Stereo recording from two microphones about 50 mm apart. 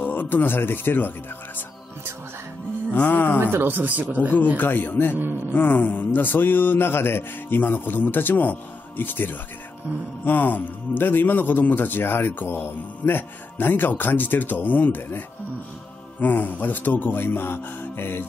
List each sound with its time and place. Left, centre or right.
0.0 s speech: left
2.9 s speech: left
3.6 s speech: right
4.6 s speech: left